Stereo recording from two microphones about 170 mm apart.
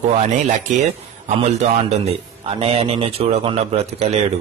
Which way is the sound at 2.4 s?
35° right (ahead or behind).